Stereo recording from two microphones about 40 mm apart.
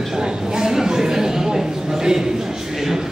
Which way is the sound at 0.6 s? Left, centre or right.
Centre.